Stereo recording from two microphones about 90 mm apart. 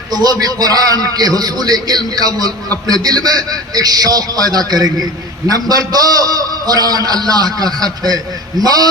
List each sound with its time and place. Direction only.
0.1 s a man's voice: 45° right (ahead or behind)